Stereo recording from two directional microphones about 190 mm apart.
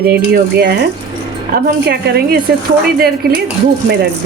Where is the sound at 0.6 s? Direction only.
55° right (ahead or behind).